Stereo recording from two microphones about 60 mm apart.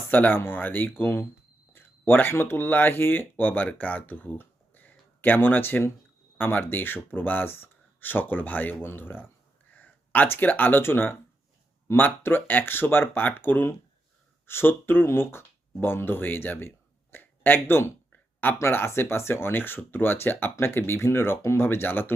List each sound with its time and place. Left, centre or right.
0.1 s speech: left